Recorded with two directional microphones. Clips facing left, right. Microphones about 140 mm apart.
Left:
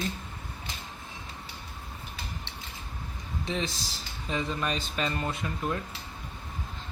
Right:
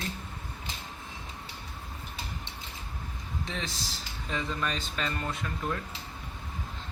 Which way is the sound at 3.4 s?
15° left (ahead or behind).